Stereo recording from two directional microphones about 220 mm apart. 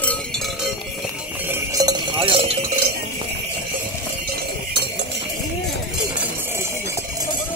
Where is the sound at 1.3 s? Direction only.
10° right (ahead or behind); by 2.5 s 25° right (ahead or behind).